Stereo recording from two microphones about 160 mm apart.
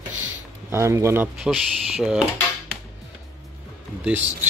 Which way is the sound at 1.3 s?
5° right (ahead or behind).